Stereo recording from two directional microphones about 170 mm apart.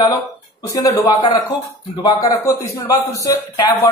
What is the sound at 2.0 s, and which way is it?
Speech, 20° left (ahead or behind).